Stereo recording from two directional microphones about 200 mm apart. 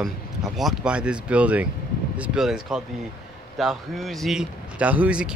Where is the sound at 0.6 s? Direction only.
5° right (ahead or behind).